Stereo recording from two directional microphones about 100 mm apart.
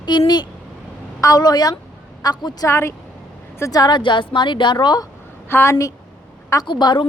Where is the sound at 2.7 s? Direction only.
25° left (ahead or behind).